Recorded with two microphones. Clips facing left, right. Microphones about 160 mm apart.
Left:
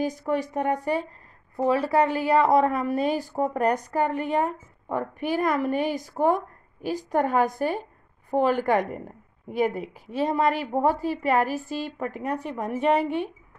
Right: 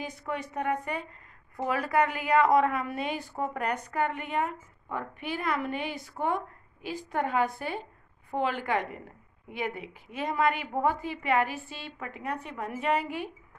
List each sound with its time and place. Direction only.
0.0 s a woman's voice: 35° left (ahead or behind)